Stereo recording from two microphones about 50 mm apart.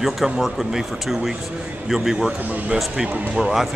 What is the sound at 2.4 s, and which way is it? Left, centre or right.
Speech, right.